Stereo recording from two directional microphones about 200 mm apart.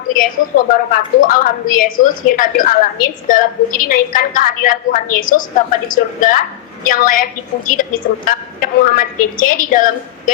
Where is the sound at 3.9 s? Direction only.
40° left (ahead or behind).